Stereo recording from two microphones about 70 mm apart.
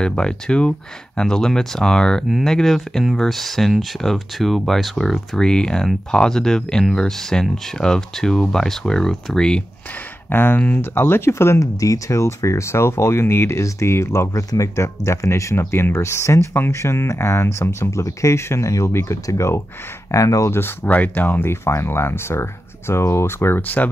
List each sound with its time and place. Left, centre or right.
0.0 s speech: centre
10.3 s speech: left
11.0 s speech: left
20.1 s speech: left
20.8 s speech: left
21.6 s speech: left